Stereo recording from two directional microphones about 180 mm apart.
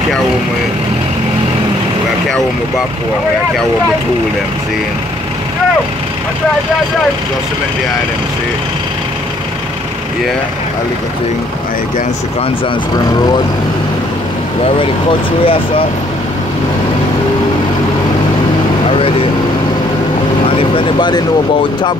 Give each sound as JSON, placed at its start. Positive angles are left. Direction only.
{"t": 12.9, "sound": "speech", "side_deg": 20}
{"t": 14.6, "sound": "speech", "side_deg": 30}
{"t": 18.9, "sound": "vehicle", "side_deg": 30}
{"t": 20.4, "sound": "speech", "side_deg": 25}